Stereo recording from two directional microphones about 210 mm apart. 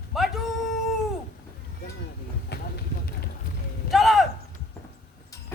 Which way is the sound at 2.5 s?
50° left (ahead or behind).